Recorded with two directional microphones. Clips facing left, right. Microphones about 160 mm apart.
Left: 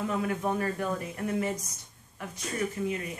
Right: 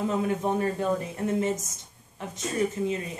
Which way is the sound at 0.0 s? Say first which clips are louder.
Right 3 dB; 25° right (ahead or behind).